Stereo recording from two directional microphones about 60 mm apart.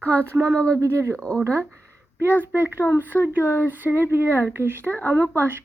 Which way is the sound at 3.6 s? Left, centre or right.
Right.